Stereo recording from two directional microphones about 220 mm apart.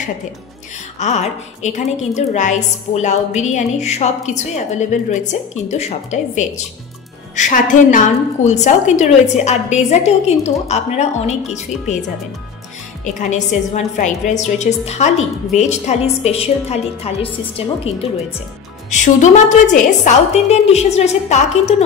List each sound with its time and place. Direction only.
0.9 s a woman's voice: 30° left (ahead or behind)
13.0 s a woman's voice: 35° left (ahead or behind)